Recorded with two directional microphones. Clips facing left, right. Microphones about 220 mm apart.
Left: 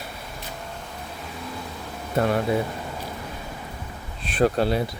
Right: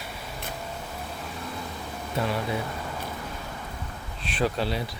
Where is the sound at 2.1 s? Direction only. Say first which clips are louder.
Left 6 dB; 50° left (ahead or behind).